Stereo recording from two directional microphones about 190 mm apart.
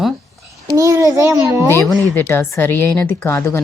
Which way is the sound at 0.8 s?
15° right (ahead or behind).